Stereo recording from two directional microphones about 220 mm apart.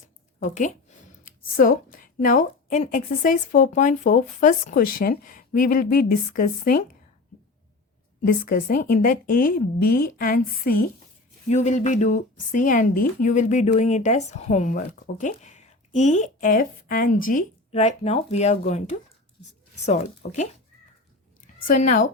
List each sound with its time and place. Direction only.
0.3 s a woman's voice: 35° left (ahead or behind)
8.2 s speech: 40° left (ahead or behind)
19.8 s speech: 30° left (ahead or behind)
21.4 s a sound: 35° left (ahead or behind)